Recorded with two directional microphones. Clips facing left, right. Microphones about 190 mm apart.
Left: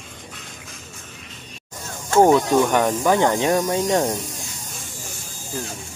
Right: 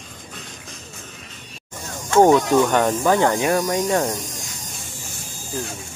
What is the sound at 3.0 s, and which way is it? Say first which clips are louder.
Speech: even; 15° left (ahead or behind).